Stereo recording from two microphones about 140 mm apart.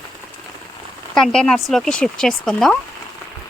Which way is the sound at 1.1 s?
5° left (ahead or behind).